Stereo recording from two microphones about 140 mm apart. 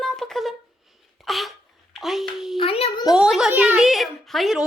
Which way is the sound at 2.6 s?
40° left (ahead or behind).